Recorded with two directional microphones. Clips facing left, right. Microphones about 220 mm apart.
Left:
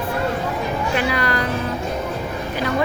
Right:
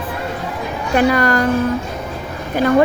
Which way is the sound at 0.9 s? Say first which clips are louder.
Right 10 dB; 45° right (ahead or behind).